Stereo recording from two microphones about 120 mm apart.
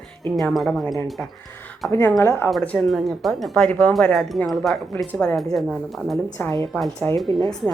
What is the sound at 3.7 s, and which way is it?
A woman's voice, 10° left (ahead or behind).